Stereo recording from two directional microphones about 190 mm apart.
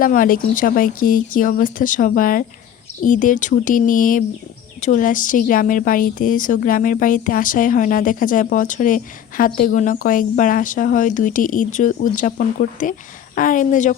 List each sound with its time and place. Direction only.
0.0 s speech: 45° left (ahead or behind)